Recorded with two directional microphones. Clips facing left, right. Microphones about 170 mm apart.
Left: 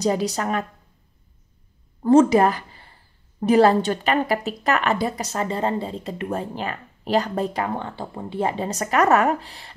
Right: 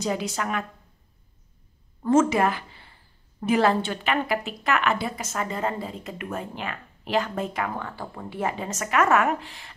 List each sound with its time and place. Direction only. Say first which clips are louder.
0.0 s a woman's voice: left 5 dB; 35° left (ahead or behind)
2.0 s a woman's voice: left 5 dB; 35° left (ahead or behind)